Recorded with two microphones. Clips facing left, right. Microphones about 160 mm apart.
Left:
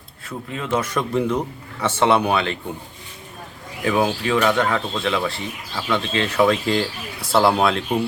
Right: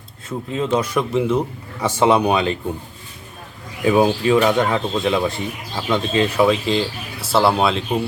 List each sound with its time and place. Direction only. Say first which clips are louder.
0.3 s speech: right 4 dB; 20° right (ahead or behind)
3.8 s speech: right 5 dB; 20° right (ahead or behind); by 7.9 s centre (ahead or behind)